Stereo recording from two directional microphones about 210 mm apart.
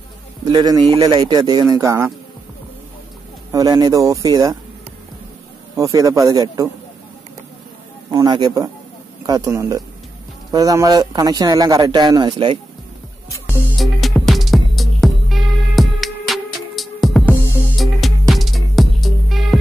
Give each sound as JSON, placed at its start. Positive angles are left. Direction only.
{"t": 0.5, "sound": "a man's voice", "side_deg": -20}
{"t": 3.5, "sound": "speech", "side_deg": -20}
{"t": 5.8, "sound": "speech", "side_deg": -15}
{"t": 8.1, "sound": "speech", "side_deg": -15}
{"t": 13.5, "sound": "music", "side_deg": 0}